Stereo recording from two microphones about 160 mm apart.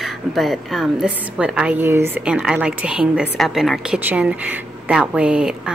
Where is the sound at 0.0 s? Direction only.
Centre (ahead or behind).